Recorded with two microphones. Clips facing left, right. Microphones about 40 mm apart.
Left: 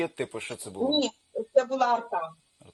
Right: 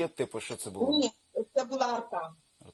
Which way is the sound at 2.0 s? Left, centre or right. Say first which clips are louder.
Left 4 dB; left.